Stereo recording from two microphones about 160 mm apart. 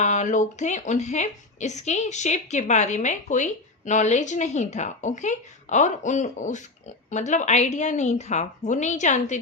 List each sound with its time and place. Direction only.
0.0 s a woman's voice: 50° left (ahead or behind)